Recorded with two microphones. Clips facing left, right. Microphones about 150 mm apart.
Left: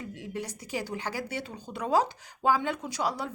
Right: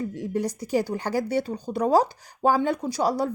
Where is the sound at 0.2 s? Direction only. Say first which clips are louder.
Right 9 dB; 40° right (ahead or behind).